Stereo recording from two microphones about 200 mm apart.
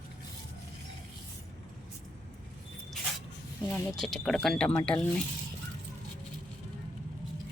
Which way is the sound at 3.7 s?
Centre (ahead or behind).